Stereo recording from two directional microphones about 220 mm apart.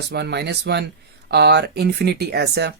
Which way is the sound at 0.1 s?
50° right (ahead or behind).